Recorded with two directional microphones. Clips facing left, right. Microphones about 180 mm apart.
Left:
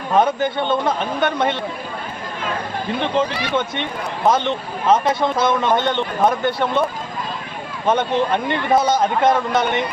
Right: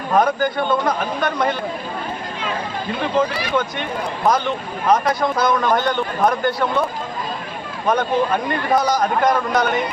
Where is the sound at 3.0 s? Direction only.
25° left (ahead or behind).